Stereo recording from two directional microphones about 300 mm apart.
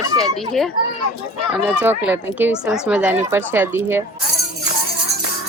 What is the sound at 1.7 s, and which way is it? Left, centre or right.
Speech, centre.